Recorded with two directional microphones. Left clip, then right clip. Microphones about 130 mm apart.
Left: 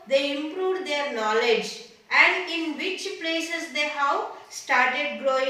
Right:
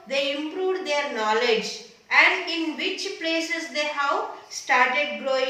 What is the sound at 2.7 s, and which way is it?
A woman's voice, 20° right (ahead or behind).